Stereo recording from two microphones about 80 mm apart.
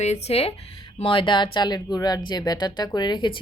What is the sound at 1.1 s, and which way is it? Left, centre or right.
Speech, left.